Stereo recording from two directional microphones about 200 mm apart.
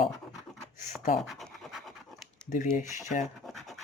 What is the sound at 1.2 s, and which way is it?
Scratch, centre (ahead or behind).